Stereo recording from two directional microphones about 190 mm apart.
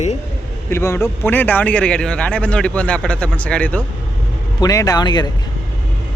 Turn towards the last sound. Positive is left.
turn(degrees=20)  # may be behind; listen again after turning